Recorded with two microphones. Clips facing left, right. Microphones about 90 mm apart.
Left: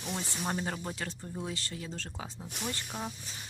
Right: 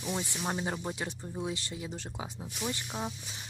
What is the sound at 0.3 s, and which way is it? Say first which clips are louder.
Speech: right 1 dB; 10° right (ahead or behind).